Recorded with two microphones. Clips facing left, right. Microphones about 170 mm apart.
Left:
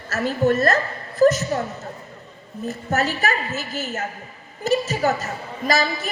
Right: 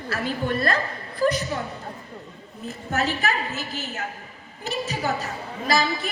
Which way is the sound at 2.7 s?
40° left (ahead or behind).